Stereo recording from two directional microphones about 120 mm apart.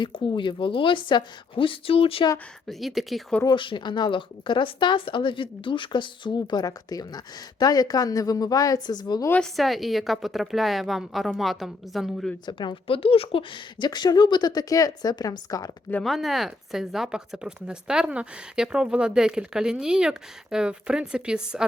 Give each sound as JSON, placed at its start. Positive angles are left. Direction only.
{"t": 0.0, "sound": "a woman's voice", "side_deg": 40}
{"t": 2.6, "sound": "speech", "side_deg": 0}
{"t": 3.4, "sound": "speech", "side_deg": 45}
{"t": 9.4, "sound": "speech", "side_deg": 0}
{"t": 12.5, "sound": "speech", "side_deg": 40}
{"t": 16.0, "sound": "speech", "side_deg": 0}